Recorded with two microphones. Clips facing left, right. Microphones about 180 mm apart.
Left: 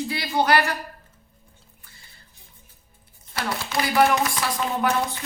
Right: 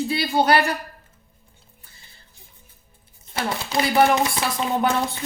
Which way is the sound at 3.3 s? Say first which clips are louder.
Right 3 dB; 25° right (ahead or behind).